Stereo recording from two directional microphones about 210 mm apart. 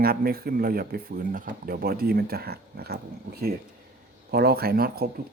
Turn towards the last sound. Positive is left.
turn(degrees=-45)  # may be behind; listen again after turning